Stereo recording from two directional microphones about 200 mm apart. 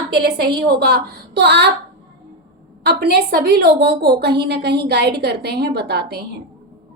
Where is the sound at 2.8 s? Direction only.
55° right (ahead or behind).